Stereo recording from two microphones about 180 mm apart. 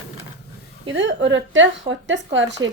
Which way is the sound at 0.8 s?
90° right.